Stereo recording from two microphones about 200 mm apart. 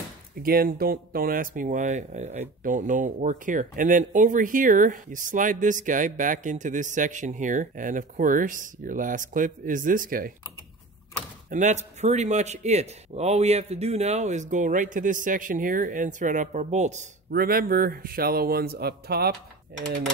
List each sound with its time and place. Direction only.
0.4 s speech: 50° right (ahead or behind)
11.5 s speech: 35° right (ahead or behind)
17.3 s speech: 50° right (ahead or behind)